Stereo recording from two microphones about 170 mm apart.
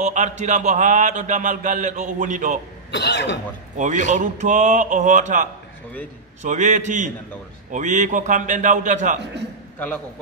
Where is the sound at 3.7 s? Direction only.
45° right (ahead or behind).